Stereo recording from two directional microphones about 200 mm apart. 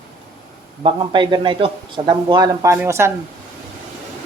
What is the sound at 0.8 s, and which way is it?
A man's voice, 20° right (ahead or behind).